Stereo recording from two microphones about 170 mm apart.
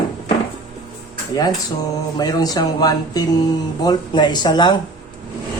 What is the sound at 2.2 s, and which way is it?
Speech, 20° left (ahead or behind).